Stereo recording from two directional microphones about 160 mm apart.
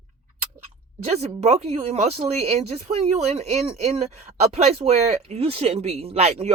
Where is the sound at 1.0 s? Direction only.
40° right (ahead or behind).